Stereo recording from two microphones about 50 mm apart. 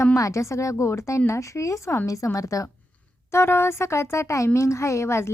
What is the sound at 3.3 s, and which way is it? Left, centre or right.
Speech, left.